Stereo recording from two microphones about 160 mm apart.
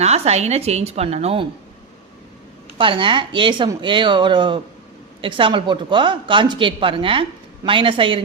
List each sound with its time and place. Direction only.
0.0 s speech: 40° right (ahead or behind)
2.7 s speech: 30° right (ahead or behind)